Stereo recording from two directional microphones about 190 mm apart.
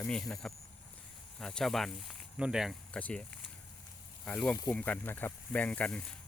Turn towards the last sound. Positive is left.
turn(degrees=5)  # may be behind; listen again after turning